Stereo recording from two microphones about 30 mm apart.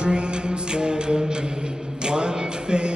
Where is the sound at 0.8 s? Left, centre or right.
Right.